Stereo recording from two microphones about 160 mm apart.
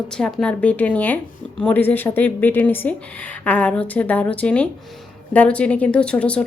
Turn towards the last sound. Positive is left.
turn(degrees=5)  # may be behind; listen again after turning